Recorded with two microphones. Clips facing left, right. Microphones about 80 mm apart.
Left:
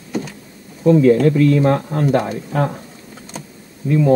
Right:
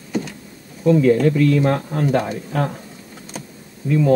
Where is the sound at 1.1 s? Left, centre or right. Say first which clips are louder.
Left 2 dB; centre.